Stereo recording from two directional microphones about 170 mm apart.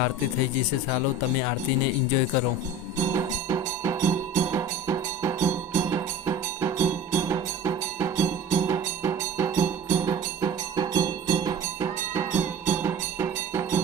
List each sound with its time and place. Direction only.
3.0 s music: 20° right (ahead or behind)